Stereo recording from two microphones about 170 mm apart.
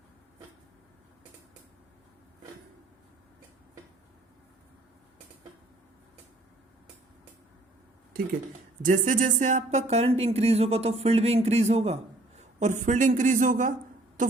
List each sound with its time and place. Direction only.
8.8 s speech: 50° right (ahead or behind)